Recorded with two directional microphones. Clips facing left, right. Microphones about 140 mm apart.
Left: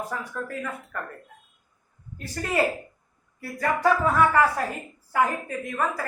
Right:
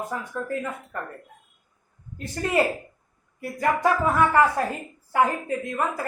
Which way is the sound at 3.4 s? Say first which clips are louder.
Right 1 dB; 20° right (ahead or behind).